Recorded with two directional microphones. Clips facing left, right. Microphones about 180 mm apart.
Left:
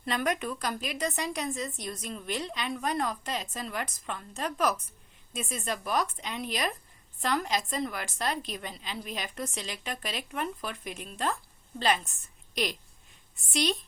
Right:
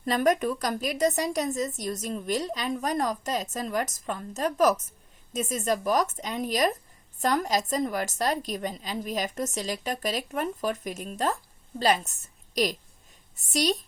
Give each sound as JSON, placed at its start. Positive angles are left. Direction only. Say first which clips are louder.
{"t": 0.0, "sound": "a woman's voice", "louder": "right 6 dB", "side_deg": -40}